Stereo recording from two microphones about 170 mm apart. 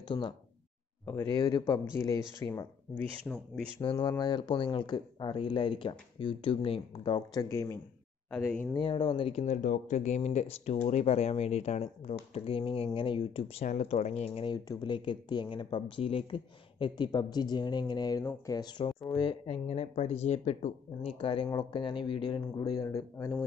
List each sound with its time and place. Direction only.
1.0 s speech: 15° left (ahead or behind)
3.8 s speech: 30° left (ahead or behind)
8.3 s speech: 5° left (ahead or behind)
8.7 s speech: 30° left (ahead or behind)